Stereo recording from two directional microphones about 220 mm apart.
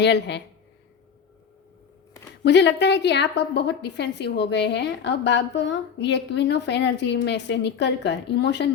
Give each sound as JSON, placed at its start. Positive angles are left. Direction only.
{"t": 0.0, "sound": "a woman's voice", "side_deg": 50}
{"t": 2.4, "sound": "a woman's voice", "side_deg": 50}